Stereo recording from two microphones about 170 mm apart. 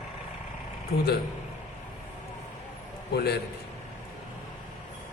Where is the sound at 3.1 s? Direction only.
70° left (ahead or behind).